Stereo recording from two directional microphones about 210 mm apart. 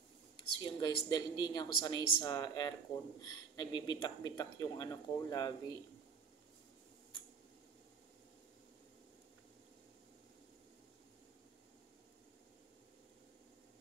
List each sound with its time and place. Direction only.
0.4 s speech: 20° left (ahead or behind)